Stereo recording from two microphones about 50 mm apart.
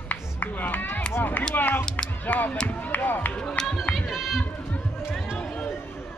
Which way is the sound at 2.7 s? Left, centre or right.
Left.